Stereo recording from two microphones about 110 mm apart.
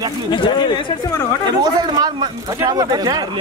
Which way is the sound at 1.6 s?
35° right (ahead or behind).